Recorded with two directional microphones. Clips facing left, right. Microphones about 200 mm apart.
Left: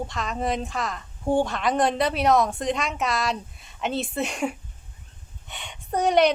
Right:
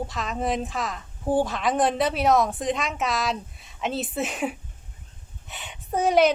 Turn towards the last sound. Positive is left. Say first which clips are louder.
# even
turn(degrees=0)  # may be behind; listen again after turning